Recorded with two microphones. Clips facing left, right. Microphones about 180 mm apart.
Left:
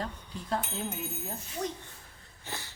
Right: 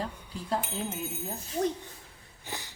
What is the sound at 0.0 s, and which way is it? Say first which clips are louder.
Speech: right 1 dB; 5° right (ahead or behind).